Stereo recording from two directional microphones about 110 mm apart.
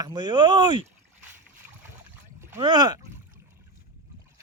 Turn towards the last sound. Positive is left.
turn(degrees=-25)  # may be behind; listen again after turning